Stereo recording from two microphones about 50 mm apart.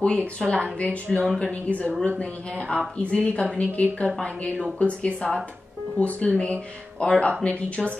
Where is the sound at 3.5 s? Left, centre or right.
Left.